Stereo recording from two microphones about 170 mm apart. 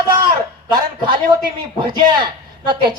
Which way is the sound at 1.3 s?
25° right (ahead or behind).